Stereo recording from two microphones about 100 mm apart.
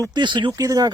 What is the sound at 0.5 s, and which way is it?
Speech, 35° right (ahead or behind).